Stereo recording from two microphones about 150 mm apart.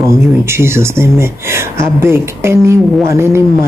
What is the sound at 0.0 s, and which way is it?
Speech, 15° right (ahead or behind).